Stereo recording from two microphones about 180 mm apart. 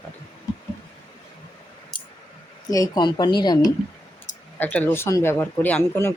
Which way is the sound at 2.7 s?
20° left (ahead or behind).